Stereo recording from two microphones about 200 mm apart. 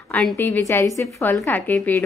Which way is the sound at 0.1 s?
10° left (ahead or behind).